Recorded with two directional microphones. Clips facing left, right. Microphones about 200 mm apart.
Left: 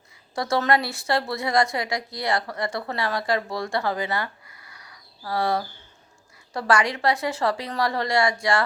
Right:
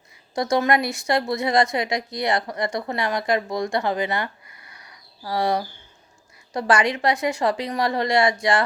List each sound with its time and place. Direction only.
0.3 s a woman's voice: 15° right (ahead or behind)